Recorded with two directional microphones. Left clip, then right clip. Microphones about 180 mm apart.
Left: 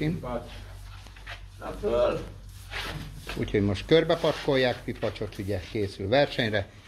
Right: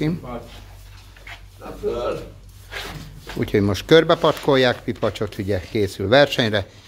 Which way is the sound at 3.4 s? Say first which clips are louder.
Right 7 dB; 35° right (ahead or behind).